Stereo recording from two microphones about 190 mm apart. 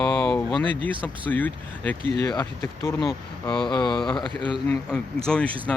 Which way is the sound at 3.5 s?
25° left (ahead or behind).